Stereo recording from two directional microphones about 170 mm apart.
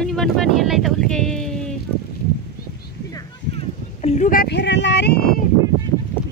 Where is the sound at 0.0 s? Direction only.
Centre (ahead or behind).